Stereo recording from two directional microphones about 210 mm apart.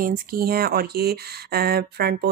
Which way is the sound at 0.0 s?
45° right (ahead or behind).